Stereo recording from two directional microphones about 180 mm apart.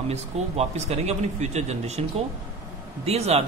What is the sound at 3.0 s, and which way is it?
Speech, 35° right (ahead or behind).